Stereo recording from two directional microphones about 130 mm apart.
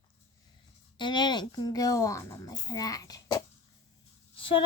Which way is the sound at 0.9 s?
35° left (ahead or behind).